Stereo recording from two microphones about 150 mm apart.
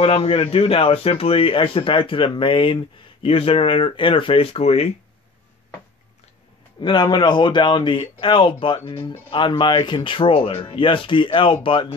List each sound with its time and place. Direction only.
0.0 s speech: 40° left (ahead or behind)
6.8 s speech: 30° left (ahead or behind)